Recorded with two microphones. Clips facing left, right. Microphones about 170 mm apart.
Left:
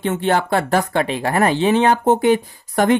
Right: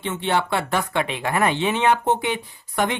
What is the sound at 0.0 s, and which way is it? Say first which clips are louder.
Speech: left 5 dB; 45° left (ahead or behind).